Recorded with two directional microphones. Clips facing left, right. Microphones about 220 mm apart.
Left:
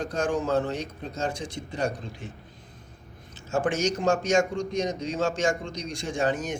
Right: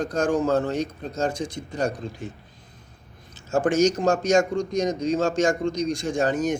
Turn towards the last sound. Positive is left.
turn(degrees=-40)  # may be behind; listen again after turning